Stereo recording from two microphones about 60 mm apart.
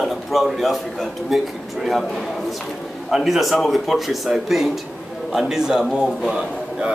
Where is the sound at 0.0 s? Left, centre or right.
Centre.